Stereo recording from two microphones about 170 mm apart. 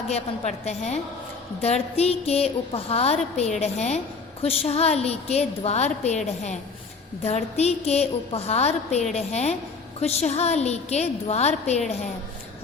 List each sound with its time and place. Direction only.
0.1 s a woman's voice: 40° left (ahead or behind)
7.3 s a woman's voice: 40° left (ahead or behind)